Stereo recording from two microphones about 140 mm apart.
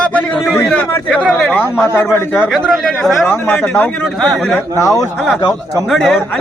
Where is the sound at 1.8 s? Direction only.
20° left (ahead or behind).